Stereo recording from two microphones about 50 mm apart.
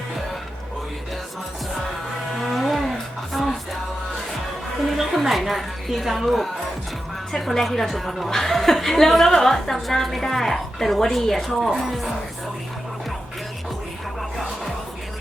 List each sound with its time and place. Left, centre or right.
2.4 s cattle: centre
3.3 s music: centre
4.9 s a woman's voice: centre
14.2 s music: centre